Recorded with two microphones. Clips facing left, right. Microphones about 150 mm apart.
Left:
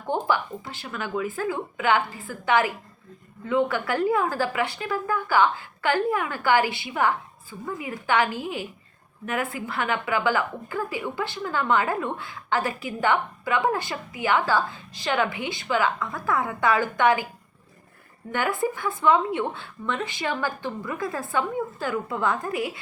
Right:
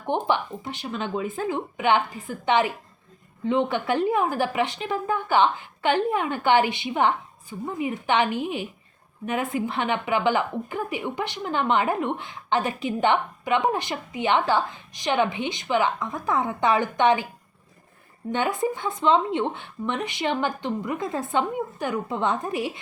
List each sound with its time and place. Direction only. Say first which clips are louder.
0.0 s a woman's voice: right 1 dB; 20° right (ahead or behind)
18.3 s a woman's voice: right 1 dB; 20° right (ahead or behind)